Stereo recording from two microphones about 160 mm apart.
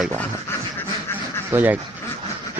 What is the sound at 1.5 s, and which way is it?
Speech, 10° right (ahead or behind).